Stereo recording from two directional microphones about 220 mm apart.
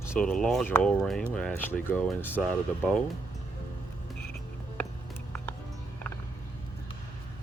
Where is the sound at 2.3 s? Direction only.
5° right (ahead or behind).